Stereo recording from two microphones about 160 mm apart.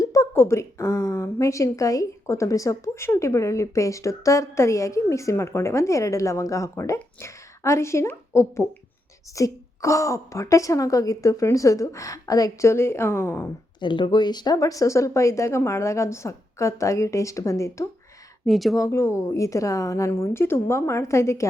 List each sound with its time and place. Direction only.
0.0 s a woman's voice: 20° left (ahead or behind)
13.7 s a woman's voice: 30° left (ahead or behind)
18.4 s speech: centre (ahead or behind)
18.8 s a woman's voice: 20° left (ahead or behind)